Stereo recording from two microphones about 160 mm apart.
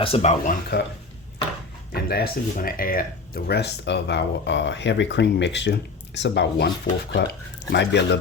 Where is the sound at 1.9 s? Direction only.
75° left (ahead or behind).